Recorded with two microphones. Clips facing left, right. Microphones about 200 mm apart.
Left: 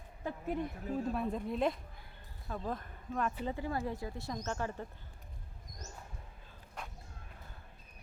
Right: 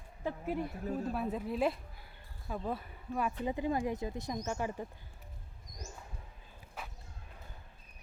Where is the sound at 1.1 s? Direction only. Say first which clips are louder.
Even; 5° right (ahead or behind).